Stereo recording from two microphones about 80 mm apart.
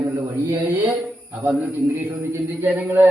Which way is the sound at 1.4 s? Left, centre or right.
Right.